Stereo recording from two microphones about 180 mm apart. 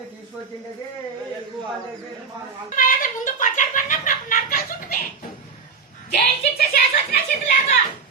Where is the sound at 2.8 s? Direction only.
50° left (ahead or behind).